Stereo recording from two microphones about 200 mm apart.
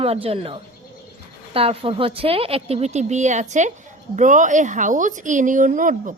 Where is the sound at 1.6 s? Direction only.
30° right (ahead or behind).